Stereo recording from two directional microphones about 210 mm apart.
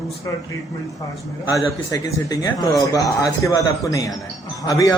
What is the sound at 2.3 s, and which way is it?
Speech, 15° left (ahead or behind).